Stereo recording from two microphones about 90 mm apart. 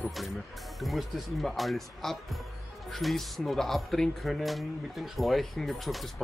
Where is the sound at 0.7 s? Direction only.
Centre (ahead or behind).